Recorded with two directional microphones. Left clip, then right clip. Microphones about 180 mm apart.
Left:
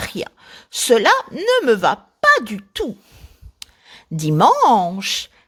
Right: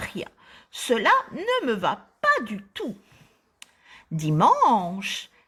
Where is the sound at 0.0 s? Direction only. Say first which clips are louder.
Left 7 dB; 45° left (ahead or behind).